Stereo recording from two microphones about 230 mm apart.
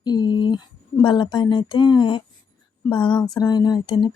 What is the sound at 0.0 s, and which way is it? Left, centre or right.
Speech, centre.